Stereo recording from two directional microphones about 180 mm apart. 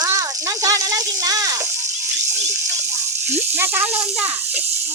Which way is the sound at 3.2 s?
10° right (ahead or behind).